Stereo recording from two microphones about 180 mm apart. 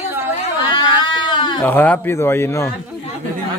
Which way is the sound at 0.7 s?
25° left (ahead or behind).